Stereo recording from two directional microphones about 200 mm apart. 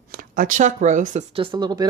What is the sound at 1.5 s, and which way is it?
Speech, 20° right (ahead or behind).